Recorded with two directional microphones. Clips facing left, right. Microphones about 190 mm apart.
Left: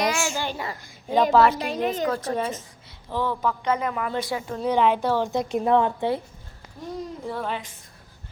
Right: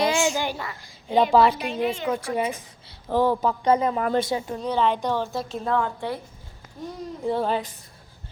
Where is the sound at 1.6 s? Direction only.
40° left (ahead or behind).